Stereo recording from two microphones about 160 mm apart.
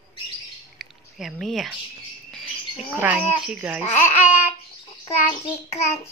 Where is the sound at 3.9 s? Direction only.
15° left (ahead or behind).